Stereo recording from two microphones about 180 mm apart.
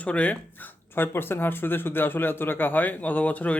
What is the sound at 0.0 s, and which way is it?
Speech, 5° left (ahead or behind).